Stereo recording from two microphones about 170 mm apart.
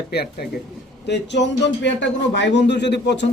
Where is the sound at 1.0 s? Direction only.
85° left.